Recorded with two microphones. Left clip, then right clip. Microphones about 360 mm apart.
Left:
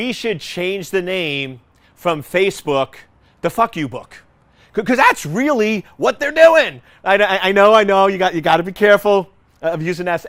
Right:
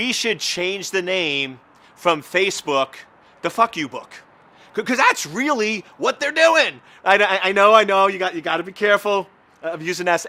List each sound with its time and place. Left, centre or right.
0.0 s speech: left
2.0 s a man's voice: left
9.7 s speech: left